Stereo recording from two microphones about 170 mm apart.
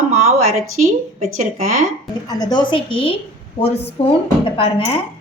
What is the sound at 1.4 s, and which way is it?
Speech, 45° right (ahead or behind).